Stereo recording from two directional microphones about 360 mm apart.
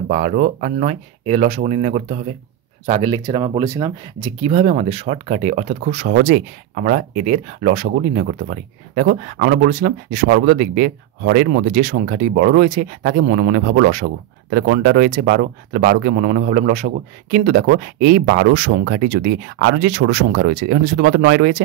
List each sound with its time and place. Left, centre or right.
0.1 s speech: right